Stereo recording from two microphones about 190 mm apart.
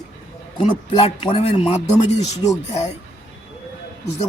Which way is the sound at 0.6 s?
30° left (ahead or behind).